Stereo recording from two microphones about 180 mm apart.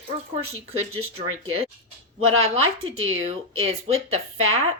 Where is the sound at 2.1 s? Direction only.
35° right (ahead or behind).